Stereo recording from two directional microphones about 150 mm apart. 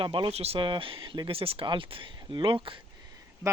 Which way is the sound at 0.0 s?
35° right (ahead or behind).